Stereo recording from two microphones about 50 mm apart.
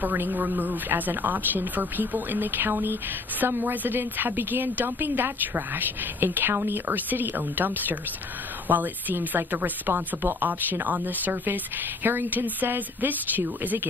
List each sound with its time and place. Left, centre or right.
0.0 s speech: right